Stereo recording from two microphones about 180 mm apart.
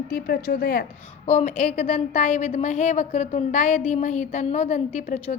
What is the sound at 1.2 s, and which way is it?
A woman's voice, 40° left (ahead or behind).